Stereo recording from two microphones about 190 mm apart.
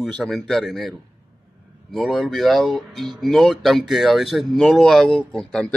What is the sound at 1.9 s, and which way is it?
Speech, centre (ahead or behind).